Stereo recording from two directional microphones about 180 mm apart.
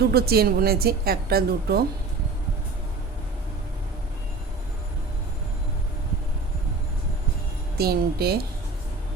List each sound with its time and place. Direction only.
0.0 s a woman's voice: 60° right (ahead or behind)
7.8 s a woman's voice: 60° right (ahead or behind)